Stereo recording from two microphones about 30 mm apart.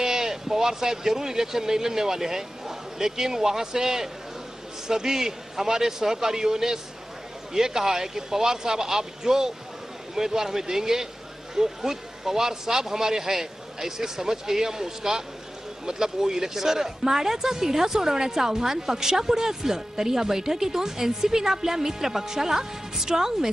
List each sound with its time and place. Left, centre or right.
0.0 s a woman's voice: centre